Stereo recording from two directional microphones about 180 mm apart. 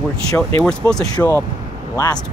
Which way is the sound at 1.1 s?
15° left (ahead or behind).